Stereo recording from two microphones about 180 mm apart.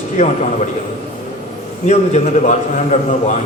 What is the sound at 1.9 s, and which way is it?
A man's voice, 40° left (ahead or behind).